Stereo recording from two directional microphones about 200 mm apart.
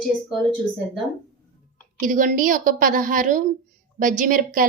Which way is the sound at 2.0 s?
40° right (ahead or behind).